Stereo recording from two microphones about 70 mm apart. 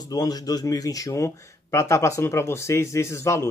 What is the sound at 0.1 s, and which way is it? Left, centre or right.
Speech, left.